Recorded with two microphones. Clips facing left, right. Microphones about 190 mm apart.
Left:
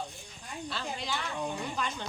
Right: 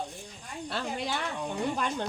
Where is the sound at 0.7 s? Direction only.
55° right (ahead or behind).